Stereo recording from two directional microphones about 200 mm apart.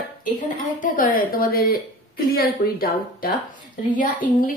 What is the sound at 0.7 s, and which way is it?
A woman's voice, 40° left (ahead or behind).